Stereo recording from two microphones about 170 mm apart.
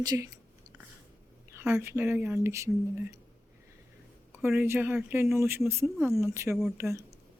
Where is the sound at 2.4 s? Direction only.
15° right (ahead or behind).